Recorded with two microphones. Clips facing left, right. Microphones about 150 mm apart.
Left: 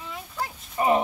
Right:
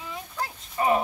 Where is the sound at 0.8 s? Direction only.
20° left (ahead or behind).